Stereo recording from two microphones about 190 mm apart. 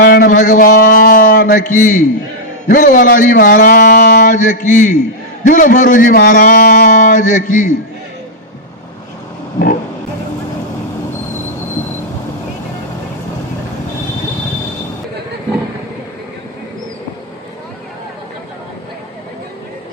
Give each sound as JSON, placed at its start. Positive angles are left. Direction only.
{"t": 0.0, "sound": "mantra", "side_deg": 50}
{"t": 2.6, "sound": "a man's voice", "side_deg": 45}